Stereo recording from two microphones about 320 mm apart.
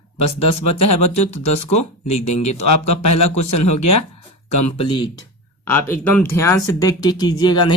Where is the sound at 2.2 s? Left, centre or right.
Left.